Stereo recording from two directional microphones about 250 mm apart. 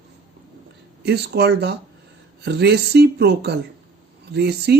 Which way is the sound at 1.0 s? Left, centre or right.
Right.